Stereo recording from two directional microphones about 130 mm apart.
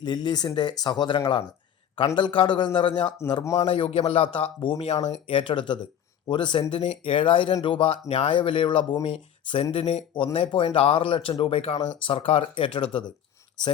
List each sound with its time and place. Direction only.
0.0 s speech: 35° left (ahead or behind)
3.4 s a man's voice: 25° left (ahead or behind)
3.7 s speech: 45° left (ahead or behind)